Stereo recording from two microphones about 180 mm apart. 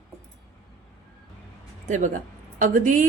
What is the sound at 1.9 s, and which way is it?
A woman's voice, 45° right (ahead or behind).